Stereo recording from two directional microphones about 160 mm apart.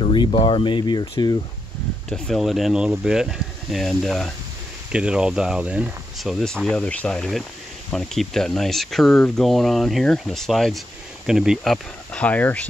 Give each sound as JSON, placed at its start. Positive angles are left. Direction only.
{"t": 0.0, "sound": "speech", "side_deg": 35}
{"t": 2.0, "sound": "speech", "side_deg": 5}